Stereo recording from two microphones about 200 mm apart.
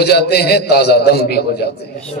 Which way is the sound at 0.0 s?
55° left (ahead or behind).